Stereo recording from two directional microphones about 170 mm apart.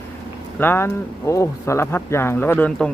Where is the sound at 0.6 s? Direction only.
15° left (ahead or behind).